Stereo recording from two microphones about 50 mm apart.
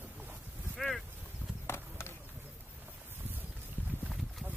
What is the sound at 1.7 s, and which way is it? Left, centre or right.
Run, left.